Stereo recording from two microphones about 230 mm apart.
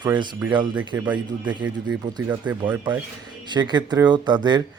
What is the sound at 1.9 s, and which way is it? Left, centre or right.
Speech, centre.